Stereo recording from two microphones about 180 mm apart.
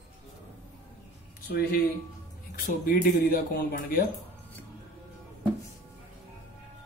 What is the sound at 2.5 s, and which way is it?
Speech, 50° left (ahead or behind).